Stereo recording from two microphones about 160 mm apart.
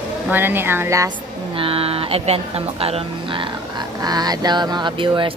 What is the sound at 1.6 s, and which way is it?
Speech, 35° right (ahead or behind).